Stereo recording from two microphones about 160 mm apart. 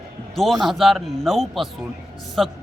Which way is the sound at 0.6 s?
Centre (ahead or behind).